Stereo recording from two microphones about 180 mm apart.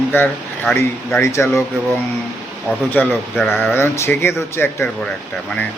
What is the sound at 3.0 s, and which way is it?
A man's voice, 10° left (ahead or behind).